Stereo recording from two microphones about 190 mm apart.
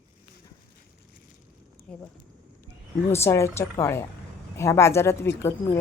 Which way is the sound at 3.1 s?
15° left (ahead or behind).